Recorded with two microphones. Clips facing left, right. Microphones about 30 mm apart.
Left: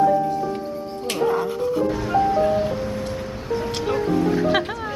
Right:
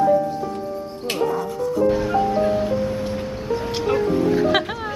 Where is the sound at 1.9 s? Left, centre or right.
Centre.